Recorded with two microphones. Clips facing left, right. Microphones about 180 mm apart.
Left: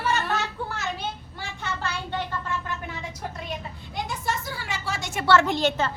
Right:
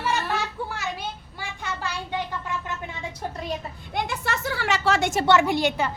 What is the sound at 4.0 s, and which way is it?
Speech, 70° right (ahead or behind).